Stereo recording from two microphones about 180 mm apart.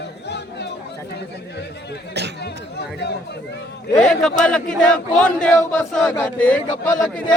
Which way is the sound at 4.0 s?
5° left (ahead or behind).